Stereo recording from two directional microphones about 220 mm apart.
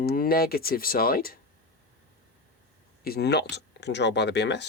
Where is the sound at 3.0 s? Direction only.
45° left (ahead or behind).